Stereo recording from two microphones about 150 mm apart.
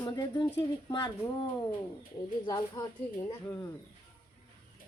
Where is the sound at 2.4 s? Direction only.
30° left (ahead or behind).